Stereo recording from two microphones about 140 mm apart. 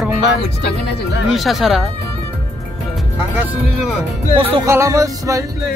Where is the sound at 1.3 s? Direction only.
Centre (ahead or behind).